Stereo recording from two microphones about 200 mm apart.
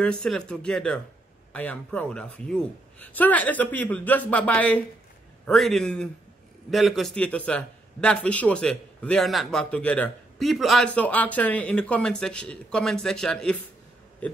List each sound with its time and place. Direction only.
0.0 s a man's voice: 5° left (ahead or behind)